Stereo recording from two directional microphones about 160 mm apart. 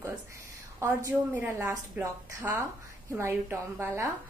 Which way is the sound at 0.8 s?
15° right (ahead or behind).